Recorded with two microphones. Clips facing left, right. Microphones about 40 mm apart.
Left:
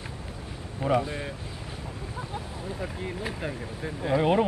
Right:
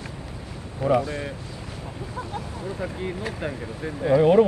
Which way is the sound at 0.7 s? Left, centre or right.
Centre.